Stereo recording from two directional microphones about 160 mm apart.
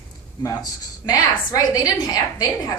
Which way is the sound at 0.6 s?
25° left (ahead or behind).